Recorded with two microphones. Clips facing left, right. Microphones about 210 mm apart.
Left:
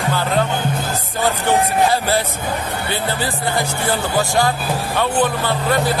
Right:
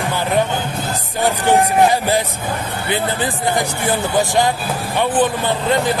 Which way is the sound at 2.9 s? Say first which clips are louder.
Right 4 dB; 15° right (ahead or behind).